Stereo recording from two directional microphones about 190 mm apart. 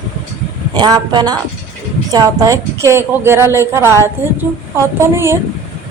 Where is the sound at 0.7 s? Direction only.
20° right (ahead or behind).